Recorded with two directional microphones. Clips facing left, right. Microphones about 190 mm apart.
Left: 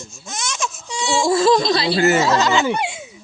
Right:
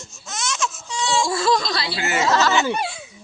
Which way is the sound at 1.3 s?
20° left (ahead or behind).